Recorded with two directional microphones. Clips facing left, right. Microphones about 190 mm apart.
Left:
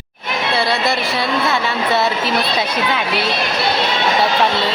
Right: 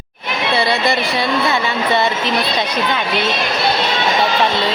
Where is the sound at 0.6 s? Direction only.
Centre (ahead or behind).